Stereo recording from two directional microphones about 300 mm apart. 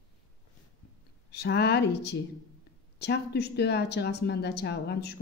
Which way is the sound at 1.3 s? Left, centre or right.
Left.